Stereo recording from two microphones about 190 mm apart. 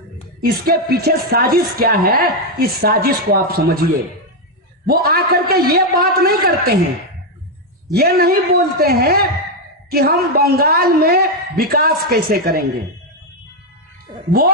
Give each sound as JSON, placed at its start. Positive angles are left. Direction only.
{"t": 0.4, "sound": "speech", "side_deg": -55}
{"t": 7.9, "sound": "speech", "side_deg": -55}